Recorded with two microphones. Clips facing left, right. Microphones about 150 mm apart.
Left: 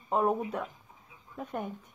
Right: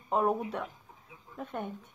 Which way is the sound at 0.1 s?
Centre (ahead or behind).